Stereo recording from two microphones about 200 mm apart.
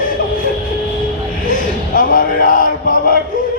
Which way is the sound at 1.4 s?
40° left (ahead or behind).